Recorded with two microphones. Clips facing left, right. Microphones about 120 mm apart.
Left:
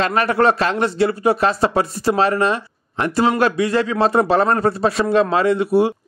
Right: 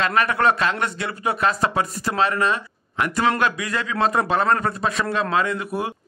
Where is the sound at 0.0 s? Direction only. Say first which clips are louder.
Left 4 dB; 35° left (ahead or behind).